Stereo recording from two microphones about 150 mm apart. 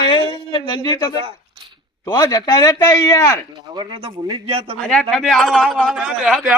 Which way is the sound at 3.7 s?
30° right (ahead or behind).